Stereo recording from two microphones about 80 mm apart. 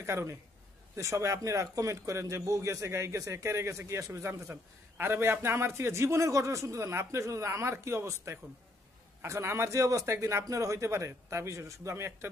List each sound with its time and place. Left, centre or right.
0.0 s a man's voice: right